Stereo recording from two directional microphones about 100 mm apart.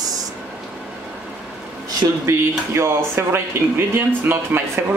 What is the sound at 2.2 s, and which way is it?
Speech, 30° right (ahead or behind).